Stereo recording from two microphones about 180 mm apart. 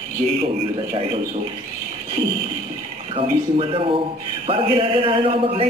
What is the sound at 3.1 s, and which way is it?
A man's voice, 30° right (ahead or behind).